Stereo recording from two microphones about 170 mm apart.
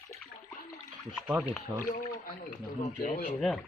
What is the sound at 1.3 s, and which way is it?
Speech, 10° right (ahead or behind).